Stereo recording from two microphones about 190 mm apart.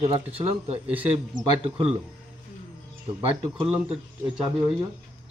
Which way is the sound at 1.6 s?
30° right (ahead or behind).